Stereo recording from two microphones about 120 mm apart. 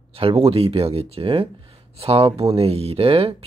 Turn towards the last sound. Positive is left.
turn(degrees=-50)  # may be behind; listen again after turning